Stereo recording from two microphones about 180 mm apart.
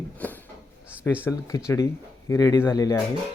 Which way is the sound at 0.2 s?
10° left (ahead or behind).